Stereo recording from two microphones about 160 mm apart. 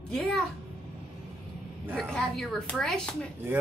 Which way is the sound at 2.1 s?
5° left (ahead or behind).